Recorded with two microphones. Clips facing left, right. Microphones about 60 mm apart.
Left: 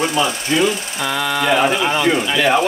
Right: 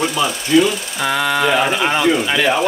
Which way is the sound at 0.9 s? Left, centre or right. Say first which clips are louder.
Right 5 dB; right.